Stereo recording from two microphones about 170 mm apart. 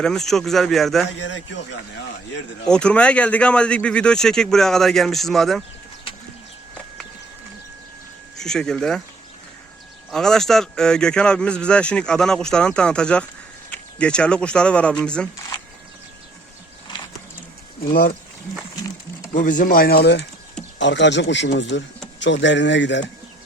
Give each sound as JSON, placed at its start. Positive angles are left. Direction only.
{"t": 0.0, "sound": "speech", "side_deg": 0}
{"t": 1.2, "sound": "speech", "side_deg": 90}
{"t": 2.6, "sound": "speech", "side_deg": 5}
{"t": 8.4, "sound": "speech", "side_deg": 5}
{"t": 10.1, "sound": "speech", "side_deg": 5}
{"t": 19.4, "sound": "speech", "side_deg": 50}